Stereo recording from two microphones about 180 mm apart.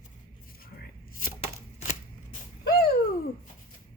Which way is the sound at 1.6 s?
40° left (ahead or behind).